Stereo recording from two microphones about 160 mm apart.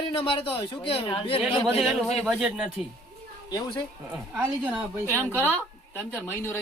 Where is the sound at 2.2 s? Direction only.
5° right (ahead or behind).